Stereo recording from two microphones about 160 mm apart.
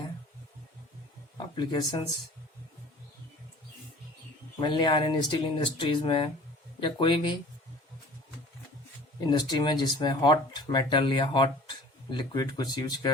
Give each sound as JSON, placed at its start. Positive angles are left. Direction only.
{"t": 1.5, "sound": "speech", "side_deg": 30}
{"t": 4.6, "sound": "speech", "side_deg": 30}
{"t": 9.2, "sound": "speech", "side_deg": 25}